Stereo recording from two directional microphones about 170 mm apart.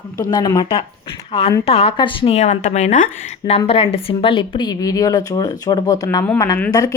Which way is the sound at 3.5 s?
35° left (ahead or behind).